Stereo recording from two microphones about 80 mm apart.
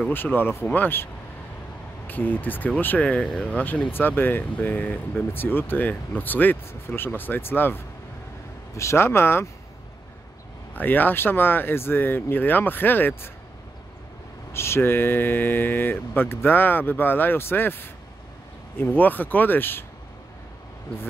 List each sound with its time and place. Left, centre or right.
0.1 s speech: left
2.0 s speech: left
10.7 s speech: left
14.5 s speech: left